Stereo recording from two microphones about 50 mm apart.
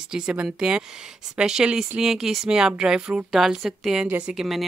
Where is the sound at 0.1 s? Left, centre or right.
Centre.